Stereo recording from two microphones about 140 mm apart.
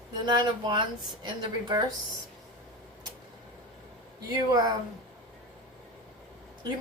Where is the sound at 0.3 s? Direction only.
30° right (ahead or behind).